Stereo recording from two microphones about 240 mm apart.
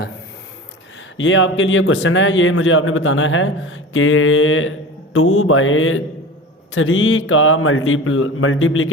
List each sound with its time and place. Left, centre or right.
1.1 s a man's voice: left